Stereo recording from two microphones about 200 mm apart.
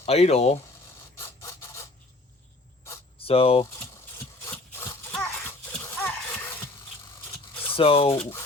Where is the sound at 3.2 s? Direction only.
30° left (ahead or behind).